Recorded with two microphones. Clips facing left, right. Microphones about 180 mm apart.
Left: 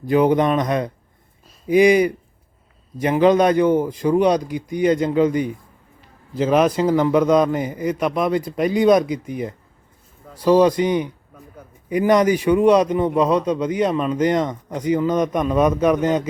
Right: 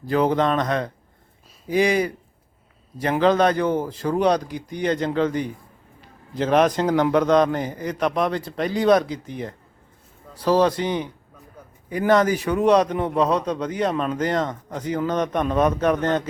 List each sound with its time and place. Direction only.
0.0 s a man's voice: 15° left (ahead or behind)